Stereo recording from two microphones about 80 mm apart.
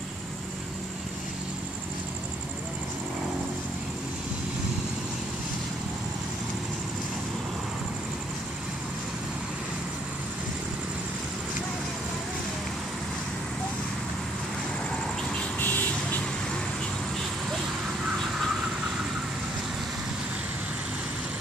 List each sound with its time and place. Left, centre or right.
15.6 s music: left